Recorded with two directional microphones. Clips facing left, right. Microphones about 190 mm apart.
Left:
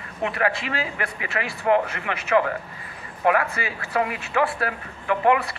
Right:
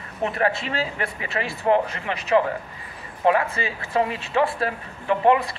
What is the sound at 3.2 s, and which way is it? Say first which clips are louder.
Speech: right 1 dB; 25° right (ahead or behind).